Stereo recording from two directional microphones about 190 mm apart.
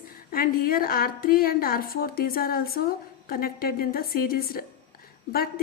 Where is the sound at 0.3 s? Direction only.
50° left (ahead or behind).